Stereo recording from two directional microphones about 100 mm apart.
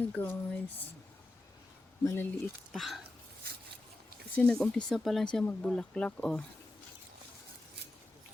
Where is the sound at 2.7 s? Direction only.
Centre (ahead or behind).